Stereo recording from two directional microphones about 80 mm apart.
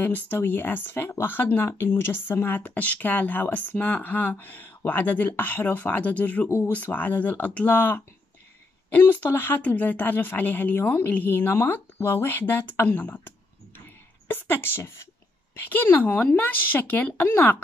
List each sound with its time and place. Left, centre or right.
0.0 s a woman's voice: left